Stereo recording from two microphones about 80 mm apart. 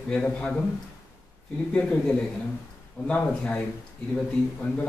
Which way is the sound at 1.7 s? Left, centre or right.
Centre.